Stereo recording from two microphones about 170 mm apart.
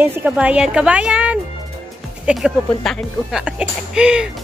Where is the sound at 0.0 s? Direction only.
10° right (ahead or behind).